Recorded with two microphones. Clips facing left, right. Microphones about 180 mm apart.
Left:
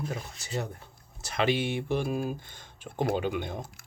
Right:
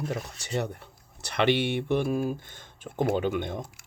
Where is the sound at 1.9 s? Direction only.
55° right (ahead or behind).